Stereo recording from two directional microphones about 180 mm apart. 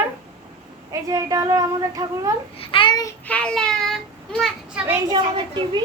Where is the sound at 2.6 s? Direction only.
30° left (ahead or behind).